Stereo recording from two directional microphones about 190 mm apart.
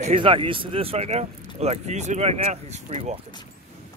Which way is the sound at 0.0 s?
25° right (ahead or behind).